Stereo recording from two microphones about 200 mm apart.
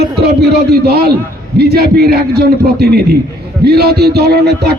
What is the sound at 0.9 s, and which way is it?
Speech, 50° right (ahead or behind).